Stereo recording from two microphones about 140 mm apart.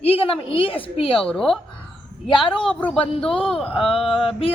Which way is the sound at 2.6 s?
10° left (ahead or behind).